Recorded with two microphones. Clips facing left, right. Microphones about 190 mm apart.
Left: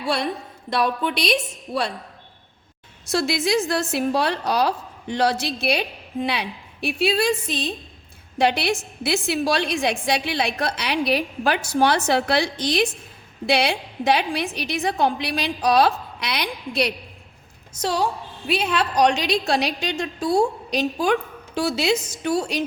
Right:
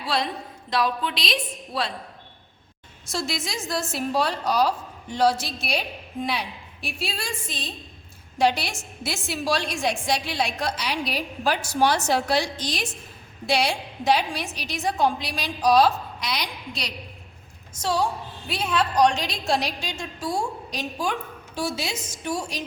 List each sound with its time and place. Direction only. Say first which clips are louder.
0.7 s a woman's voice: left 3 dB; 55° left (ahead or behind)
3.1 s a woman's voice: left 9 dB; 65° left (ahead or behind)
6.8 s a woman's voice: left 12 dB; 65° left (ahead or behind)